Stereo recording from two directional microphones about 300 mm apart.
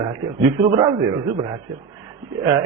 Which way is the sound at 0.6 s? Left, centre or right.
Centre.